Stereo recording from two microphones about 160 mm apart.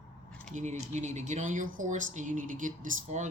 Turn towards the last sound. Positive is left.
turn(degrees=-50)  # may be behind; listen again after turning